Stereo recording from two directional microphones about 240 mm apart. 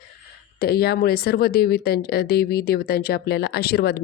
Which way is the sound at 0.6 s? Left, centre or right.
Left.